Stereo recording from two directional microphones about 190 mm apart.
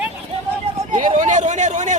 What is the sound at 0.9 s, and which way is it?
A man's voice, 40° right (ahead or behind).